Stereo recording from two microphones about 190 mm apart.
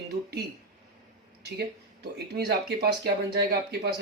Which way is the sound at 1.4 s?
60° right (ahead or behind).